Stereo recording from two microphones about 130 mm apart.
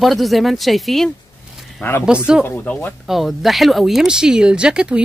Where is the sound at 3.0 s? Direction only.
Centre (ahead or behind).